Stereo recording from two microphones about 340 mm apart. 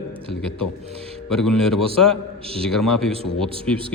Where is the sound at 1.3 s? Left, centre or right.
Centre.